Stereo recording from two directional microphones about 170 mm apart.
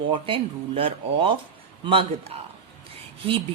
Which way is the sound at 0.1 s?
30° right (ahead or behind).